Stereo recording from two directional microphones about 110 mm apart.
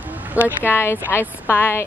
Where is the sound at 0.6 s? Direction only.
20° left (ahead or behind).